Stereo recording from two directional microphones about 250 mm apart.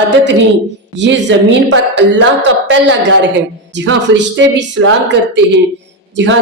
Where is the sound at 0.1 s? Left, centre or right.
Right.